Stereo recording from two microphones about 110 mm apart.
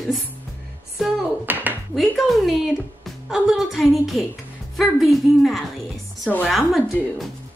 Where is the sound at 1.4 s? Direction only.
15° right (ahead or behind).